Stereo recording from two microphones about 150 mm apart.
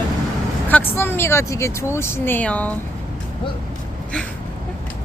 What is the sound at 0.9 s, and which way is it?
Speech, 15° left (ahead or behind).